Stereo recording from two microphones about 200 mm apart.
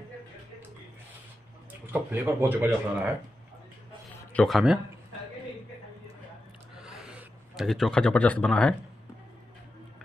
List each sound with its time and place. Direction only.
1.9 s speech: 10° right (ahead or behind)
4.3 s speech: 5° left (ahead or behind)
6.8 s a sound: 5° right (ahead or behind)